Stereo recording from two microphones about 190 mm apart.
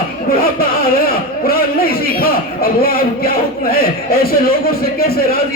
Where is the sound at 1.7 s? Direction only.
50° left (ahead or behind).